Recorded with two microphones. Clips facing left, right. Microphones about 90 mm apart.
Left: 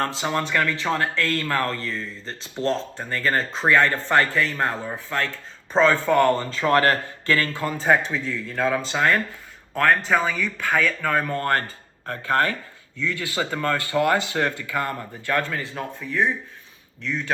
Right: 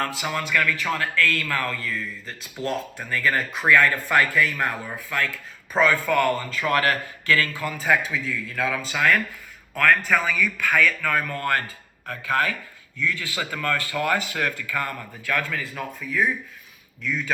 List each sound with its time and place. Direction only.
0.0 s speech: 30° left (ahead or behind)